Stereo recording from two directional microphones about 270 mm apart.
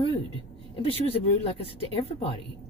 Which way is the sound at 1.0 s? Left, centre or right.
Left.